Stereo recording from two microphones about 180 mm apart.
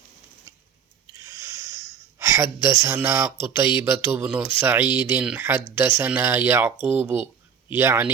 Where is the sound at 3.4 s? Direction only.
15° right (ahead or behind).